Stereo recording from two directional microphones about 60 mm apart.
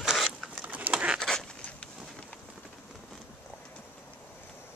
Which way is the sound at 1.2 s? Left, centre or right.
Centre.